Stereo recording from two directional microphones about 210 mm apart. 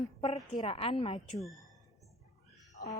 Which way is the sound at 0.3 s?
25° left (ahead or behind).